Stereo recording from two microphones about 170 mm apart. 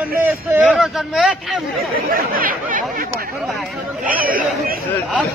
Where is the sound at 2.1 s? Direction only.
55° right (ahead or behind).